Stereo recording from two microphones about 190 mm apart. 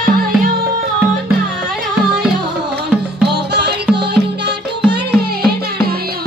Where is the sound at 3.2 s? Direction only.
60° right (ahead or behind).